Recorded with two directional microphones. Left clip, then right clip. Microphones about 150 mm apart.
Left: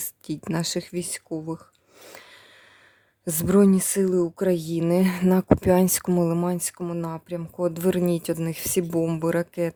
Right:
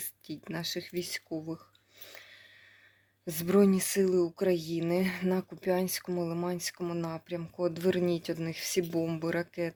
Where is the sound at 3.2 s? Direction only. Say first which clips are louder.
Left 6 dB; 60° left (ahead or behind).